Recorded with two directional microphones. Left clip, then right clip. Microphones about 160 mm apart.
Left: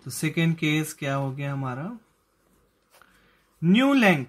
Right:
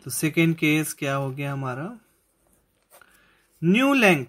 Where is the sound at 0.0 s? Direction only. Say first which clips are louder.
Right 5 dB; 30° right (ahead or behind).